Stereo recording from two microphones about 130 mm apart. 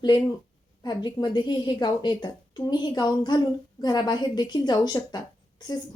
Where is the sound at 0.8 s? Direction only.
35° left (ahead or behind).